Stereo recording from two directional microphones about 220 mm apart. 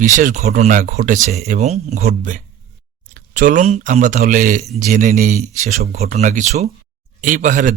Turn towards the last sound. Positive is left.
turn(degrees=-35)  # may be behind; listen again after turning